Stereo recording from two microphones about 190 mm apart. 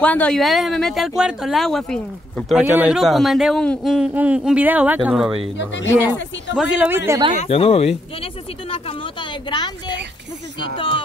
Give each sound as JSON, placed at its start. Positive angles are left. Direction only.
{"t": 0.0, "sound": "a man's voice", "side_deg": 5}
{"t": 2.6, "sound": "a man's voice", "side_deg": -10}
{"t": 5.6, "sound": "speech", "side_deg": 65}
{"t": 6.5, "sound": "speech", "side_deg": -5}
{"t": 7.1, "sound": "speech", "side_deg": -25}
{"t": 7.4, "sound": "a woman's voice", "side_deg": 30}